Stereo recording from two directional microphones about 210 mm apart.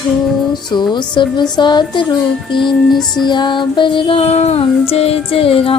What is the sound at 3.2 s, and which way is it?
Music, 20° left (ahead or behind).